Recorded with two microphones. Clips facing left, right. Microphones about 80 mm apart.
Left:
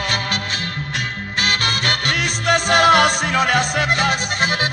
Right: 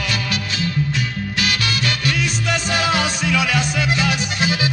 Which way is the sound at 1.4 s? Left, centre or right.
Left.